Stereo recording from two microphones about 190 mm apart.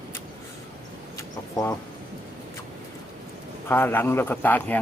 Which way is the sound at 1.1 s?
15° left (ahead or behind).